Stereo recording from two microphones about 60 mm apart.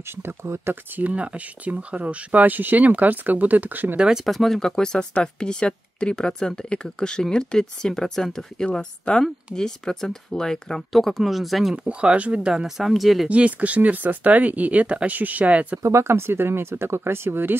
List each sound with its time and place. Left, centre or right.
0.1 s speech: right
0.9 s speech: right
3.9 s speech: centre
4.3 s speech: centre
11.7 s speech: centre
13.3 s speech: right
15.8 s speech: right